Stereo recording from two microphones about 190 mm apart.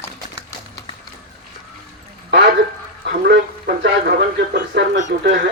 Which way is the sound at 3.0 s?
55° right (ahead or behind).